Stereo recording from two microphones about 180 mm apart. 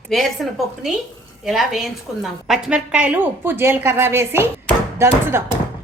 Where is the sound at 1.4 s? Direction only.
Centre (ahead or behind).